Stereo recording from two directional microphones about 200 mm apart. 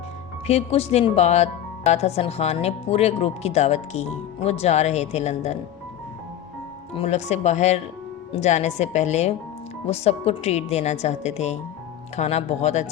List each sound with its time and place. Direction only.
0.4 s speech: 30° left (ahead or behind)
6.9 s speech: 30° left (ahead or behind)